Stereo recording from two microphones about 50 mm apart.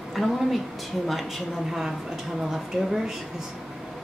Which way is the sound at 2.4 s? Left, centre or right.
Centre.